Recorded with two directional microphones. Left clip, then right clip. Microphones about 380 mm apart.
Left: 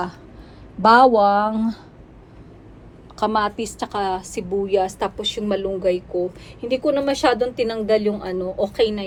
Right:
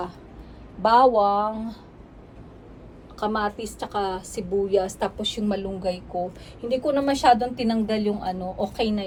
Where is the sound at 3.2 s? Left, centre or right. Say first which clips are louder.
Left 5 dB; left.